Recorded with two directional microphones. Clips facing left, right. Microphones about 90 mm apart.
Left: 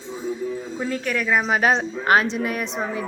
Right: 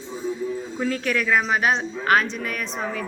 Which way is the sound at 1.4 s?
20° left (ahead or behind).